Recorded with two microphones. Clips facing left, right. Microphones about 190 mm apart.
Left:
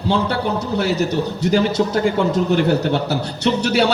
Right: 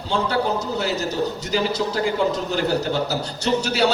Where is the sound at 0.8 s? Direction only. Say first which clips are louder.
Left 4 dB; 60° left (ahead or behind).